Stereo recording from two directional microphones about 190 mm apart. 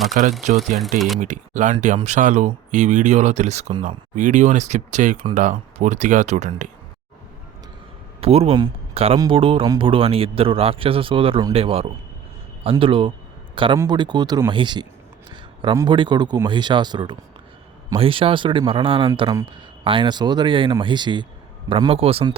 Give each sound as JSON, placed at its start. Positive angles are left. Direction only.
{"t": 0.1, "sound": "speech", "side_deg": -35}
{"t": 0.9, "sound": "speech", "side_deg": 0}
{"t": 1.2, "sound": "speech", "side_deg": -40}
{"t": 3.8, "sound": "speech", "side_deg": -40}
{"t": 8.2, "sound": "speech", "side_deg": -30}